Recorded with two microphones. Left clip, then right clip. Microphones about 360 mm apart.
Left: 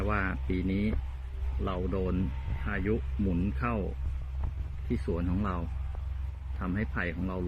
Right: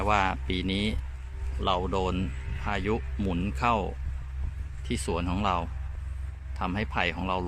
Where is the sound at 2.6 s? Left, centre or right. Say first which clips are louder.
Right 4 dB; centre.